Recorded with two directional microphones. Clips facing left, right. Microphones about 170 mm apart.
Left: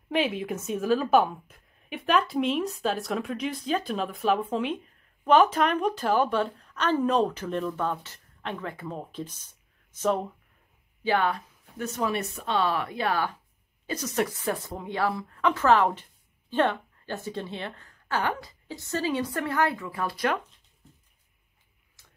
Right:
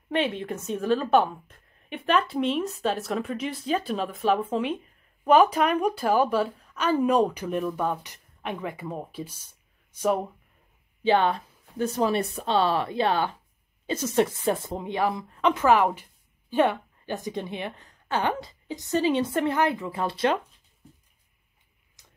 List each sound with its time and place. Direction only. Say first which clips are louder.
0.1 s a woman's voice: even; centre (ahead or behind)
11.1 s speech: right 4 dB; 25° right (ahead or behind)
22.0 s tick-tock: right 1 dB; 20° right (ahead or behind)